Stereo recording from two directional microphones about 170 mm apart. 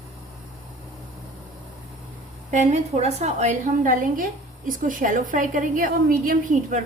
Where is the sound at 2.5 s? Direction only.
40° right (ahead or behind).